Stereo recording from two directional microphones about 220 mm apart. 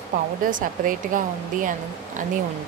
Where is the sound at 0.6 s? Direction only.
40° right (ahead or behind).